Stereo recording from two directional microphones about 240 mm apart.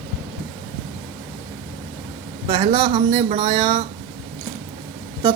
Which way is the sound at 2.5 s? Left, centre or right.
Right.